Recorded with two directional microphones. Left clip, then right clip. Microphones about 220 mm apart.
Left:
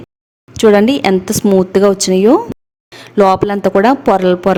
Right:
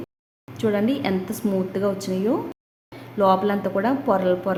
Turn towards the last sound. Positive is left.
turn(degrees=45)  # may be behind; listen again after turning